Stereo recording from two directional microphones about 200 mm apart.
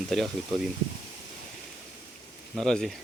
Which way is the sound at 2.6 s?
Centre (ahead or behind).